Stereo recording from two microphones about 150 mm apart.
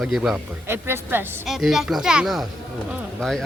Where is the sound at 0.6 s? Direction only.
15° right (ahead or behind).